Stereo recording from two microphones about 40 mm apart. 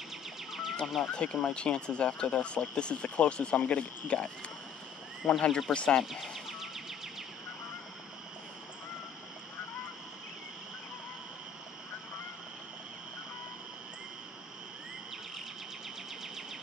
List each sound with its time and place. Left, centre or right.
0.5 s music: centre
1.1 s speech: left
6.0 s music: centre